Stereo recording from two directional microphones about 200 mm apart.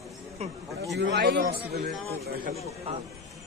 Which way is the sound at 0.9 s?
55° right (ahead or behind).